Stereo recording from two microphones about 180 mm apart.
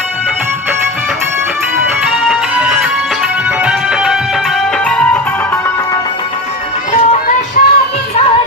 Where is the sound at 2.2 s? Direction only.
5° right (ahead or behind).